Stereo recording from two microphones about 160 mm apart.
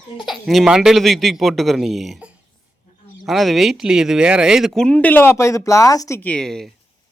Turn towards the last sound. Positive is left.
turn(degrees=5)  # may be behind; listen again after turning